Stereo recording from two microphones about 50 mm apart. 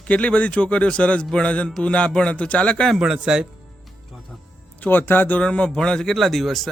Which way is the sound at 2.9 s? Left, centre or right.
Centre.